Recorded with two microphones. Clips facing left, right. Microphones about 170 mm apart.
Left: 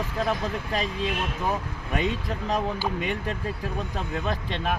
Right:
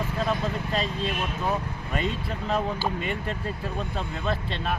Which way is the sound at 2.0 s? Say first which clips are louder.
Left 1 dB; 15° left (ahead or behind).